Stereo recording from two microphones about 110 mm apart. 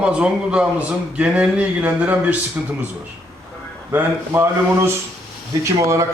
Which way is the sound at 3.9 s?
20° right (ahead or behind).